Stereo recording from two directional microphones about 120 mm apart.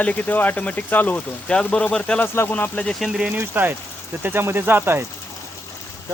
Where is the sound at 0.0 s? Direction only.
10° left (ahead or behind).